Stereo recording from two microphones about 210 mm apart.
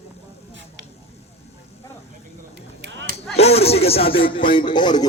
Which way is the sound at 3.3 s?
30° left (ahead or behind).